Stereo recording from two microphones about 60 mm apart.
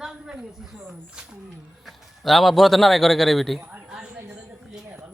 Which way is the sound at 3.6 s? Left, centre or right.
Centre.